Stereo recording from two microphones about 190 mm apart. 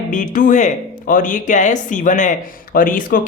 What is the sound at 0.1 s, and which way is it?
A woman's voice, 45° left (ahead or behind).